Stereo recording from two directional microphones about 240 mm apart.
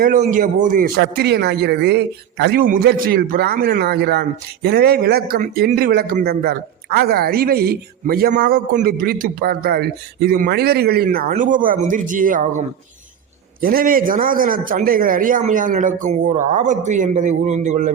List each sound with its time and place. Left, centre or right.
0.0 s a man's voice: right